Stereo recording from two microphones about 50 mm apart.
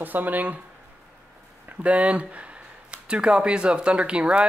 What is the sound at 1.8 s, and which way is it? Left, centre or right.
Speech, right.